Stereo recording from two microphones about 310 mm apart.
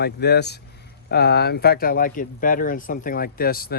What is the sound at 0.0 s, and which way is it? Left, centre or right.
Speech, left.